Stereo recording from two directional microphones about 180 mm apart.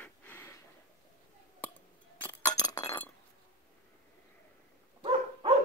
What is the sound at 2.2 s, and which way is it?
Glass, 15° left (ahead or behind).